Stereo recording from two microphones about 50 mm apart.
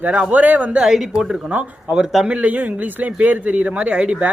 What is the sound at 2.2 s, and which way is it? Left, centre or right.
Speech, right.